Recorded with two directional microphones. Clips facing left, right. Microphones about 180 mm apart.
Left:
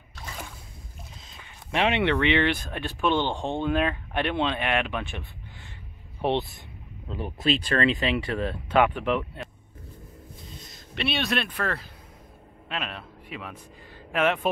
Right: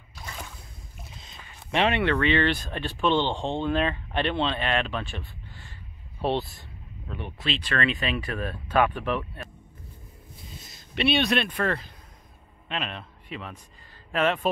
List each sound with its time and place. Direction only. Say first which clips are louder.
1.9 s speech: left 2 dB; 15° left (ahead or behind)
6.2 s speech: left 1 dB; 15° left (ahead or behind)
7.1 s speech: left 6 dB; 35° left (ahead or behind)
7.8 s speech: left 3 dB; 25° left (ahead or behind)
10.7 s a man's voice: right 5 dB; centre (ahead or behind)